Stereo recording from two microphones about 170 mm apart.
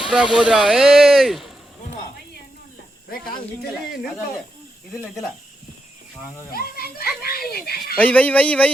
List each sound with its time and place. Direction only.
0.0 s speech: 5° right (ahead or behind)
3.1 s a child's voice: 65° left (ahead or behind)
6.5 s a child's voice: 60° left (ahead or behind)
7.9 s speech: 10° left (ahead or behind)